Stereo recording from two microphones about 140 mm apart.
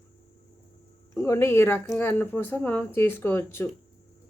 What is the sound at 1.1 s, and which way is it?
Speech, 20° left (ahead or behind).